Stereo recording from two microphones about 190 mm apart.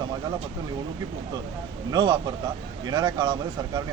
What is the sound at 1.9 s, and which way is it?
Speech, 20° right (ahead or behind).